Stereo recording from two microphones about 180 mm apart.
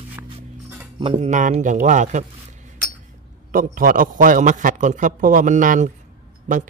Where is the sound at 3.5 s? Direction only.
50° right (ahead or behind).